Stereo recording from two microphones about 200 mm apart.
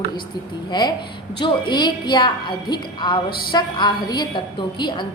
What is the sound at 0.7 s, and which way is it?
A woman's voice, 20° left (ahead or behind).